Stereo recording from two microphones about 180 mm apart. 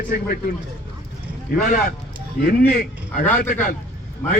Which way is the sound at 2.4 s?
55° left (ahead or behind).